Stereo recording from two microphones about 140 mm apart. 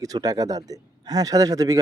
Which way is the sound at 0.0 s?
25° right (ahead or behind).